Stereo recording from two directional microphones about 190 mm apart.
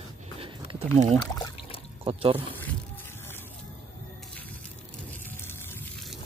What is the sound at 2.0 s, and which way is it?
Speech, 30° right (ahead or behind).